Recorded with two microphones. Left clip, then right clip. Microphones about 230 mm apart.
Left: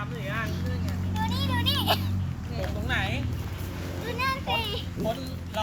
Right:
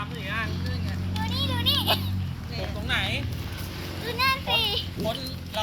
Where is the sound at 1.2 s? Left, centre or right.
Centre.